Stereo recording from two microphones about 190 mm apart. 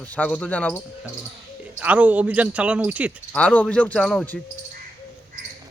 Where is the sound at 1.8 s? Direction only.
5° right (ahead or behind).